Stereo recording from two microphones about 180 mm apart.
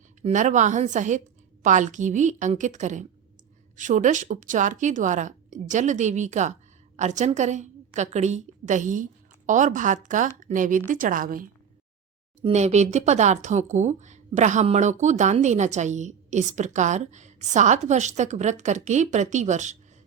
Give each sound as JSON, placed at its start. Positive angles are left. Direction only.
{"t": 0.2, "sound": "a woman's voice", "side_deg": -45}
{"t": 12.4, "sound": "a woman's voice", "side_deg": -35}